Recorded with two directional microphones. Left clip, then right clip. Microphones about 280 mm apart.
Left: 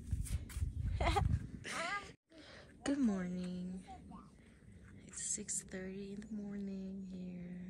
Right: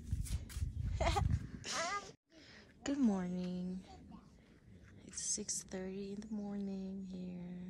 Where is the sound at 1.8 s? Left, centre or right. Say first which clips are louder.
Right 1 dB; right.